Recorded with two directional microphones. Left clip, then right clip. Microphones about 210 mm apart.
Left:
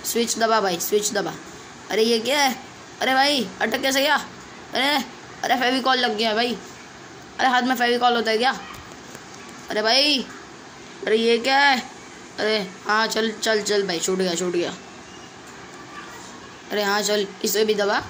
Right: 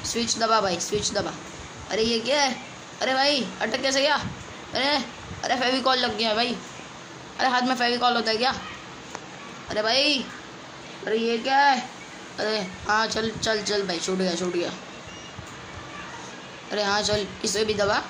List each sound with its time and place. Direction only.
0.1 s a woman's voice: 15° left (ahead or behind)
9.7 s speech: 15° left (ahead or behind)
16.7 s speech: 15° left (ahead or behind)